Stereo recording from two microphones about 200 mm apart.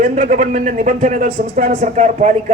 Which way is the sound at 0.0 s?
40° right (ahead or behind).